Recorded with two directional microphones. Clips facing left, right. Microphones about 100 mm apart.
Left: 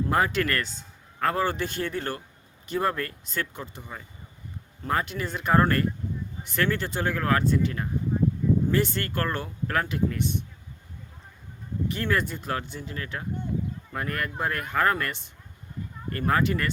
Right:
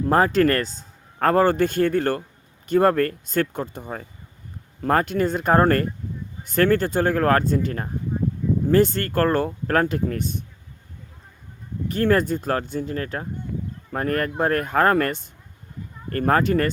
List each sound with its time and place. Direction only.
0.0 s a man's voice: 40° right (ahead or behind)
11.9 s a man's voice: 45° right (ahead or behind)